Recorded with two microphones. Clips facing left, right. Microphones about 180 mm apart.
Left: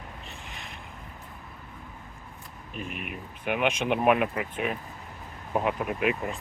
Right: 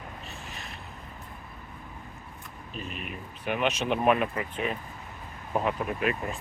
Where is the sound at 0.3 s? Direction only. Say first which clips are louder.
Right 1 dB; 15° left (ahead or behind).